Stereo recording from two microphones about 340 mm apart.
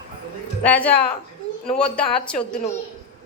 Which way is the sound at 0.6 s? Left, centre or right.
Centre.